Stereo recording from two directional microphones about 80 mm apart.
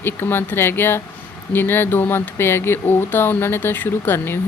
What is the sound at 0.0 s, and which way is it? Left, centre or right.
Speech, left.